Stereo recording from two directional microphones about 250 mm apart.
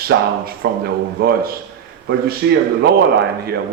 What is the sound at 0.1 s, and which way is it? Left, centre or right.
Speech, right.